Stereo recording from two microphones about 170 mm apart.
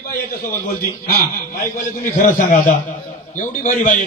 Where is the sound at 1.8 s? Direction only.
50° left (ahead or behind).